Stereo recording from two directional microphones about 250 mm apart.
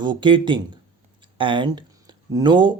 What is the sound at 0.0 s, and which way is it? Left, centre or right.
Speech, centre.